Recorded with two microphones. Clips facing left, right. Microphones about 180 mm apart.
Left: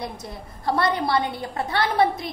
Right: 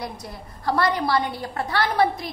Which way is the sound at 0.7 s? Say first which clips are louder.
Even; 25° left (ahead or behind).